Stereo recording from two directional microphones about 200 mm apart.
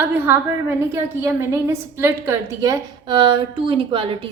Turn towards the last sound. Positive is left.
turn(degrees=-25)  # may be behind; listen again after turning